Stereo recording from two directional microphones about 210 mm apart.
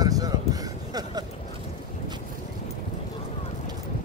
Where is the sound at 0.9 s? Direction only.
20° right (ahead or behind).